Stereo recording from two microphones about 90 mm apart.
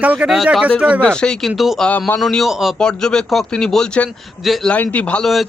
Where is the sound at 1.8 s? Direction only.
15° left (ahead or behind).